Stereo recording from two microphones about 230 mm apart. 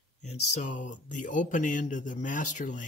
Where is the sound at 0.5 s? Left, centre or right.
Left.